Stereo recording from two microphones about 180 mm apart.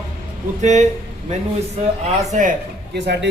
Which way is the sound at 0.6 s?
40° right (ahead or behind).